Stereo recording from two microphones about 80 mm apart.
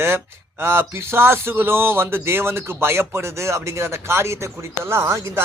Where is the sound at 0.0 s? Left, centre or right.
Right.